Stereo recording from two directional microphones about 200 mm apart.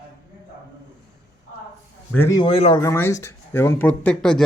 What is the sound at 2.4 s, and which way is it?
Speech, 25° left (ahead or behind).